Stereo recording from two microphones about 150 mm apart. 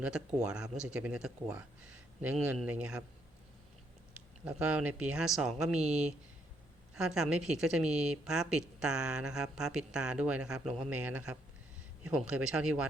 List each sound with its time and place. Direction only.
0.0 s speech: 10° right (ahead or behind)
4.4 s speech: 10° right (ahead or behind)
6.9 s speech: 5° right (ahead or behind)